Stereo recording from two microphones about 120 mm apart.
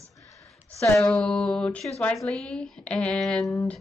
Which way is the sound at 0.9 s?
5° left (ahead or behind).